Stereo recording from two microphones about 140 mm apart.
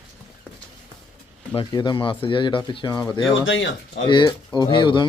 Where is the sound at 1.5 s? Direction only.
35° left (ahead or behind).